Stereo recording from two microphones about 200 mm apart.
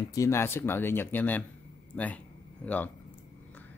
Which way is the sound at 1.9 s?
5° left (ahead or behind).